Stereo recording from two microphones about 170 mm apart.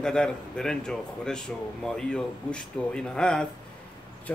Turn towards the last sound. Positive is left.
turn(degrees=5)  # may be behind; listen again after turning